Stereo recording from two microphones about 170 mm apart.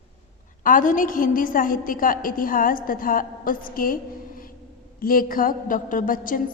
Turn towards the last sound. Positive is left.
turn(degrees=55)  # may be behind; listen again after turning